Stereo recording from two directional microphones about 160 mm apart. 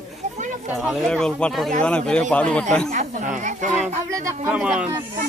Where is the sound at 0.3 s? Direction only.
50° right (ahead or behind).